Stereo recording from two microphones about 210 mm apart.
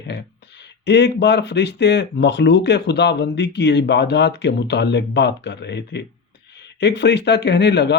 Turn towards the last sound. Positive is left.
turn(degrees=55)  # may be behind; listen again after turning